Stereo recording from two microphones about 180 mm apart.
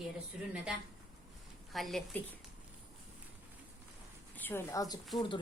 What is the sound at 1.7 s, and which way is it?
Speech, centre (ahead or behind).